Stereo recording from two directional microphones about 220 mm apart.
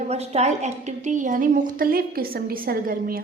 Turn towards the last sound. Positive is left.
turn(degrees=-40)  # may be behind; listen again after turning